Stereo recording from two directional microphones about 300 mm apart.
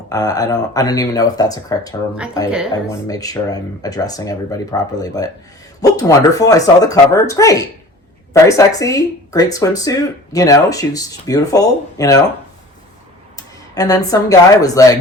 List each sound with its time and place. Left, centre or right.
0.1 s speech: centre
2.5 s speech: centre
3.1 s speech: centre
13.3 s speech: centre